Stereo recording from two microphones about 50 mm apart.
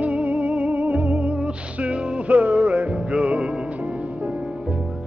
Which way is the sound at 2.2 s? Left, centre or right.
Right.